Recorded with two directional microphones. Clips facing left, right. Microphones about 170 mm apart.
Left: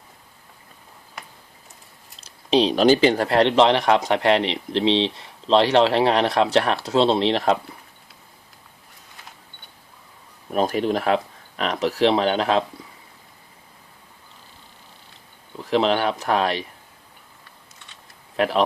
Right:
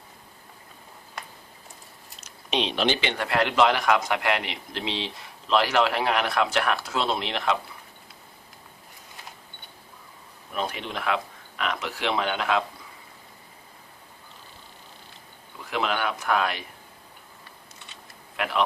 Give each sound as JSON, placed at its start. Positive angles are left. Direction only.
{"t": 2.1, "sound": "speech", "side_deg": 30}
{"t": 10.5, "sound": "speech", "side_deg": 40}
{"t": 15.5, "sound": "speech", "side_deg": 30}
{"t": 18.3, "sound": "speech", "side_deg": 35}